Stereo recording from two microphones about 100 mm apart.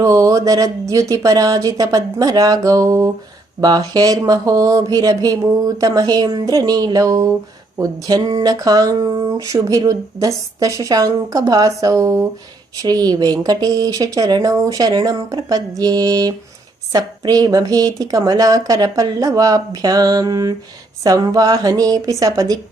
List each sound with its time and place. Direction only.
0.0 s speech: 35° right (ahead or behind)